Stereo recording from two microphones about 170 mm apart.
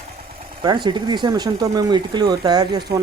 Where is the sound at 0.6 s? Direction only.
25° right (ahead or behind).